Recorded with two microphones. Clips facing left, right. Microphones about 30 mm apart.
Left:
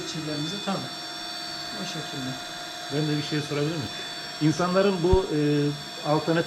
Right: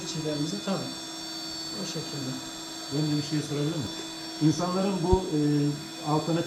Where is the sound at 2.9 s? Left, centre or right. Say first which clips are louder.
Left 1 dB; left.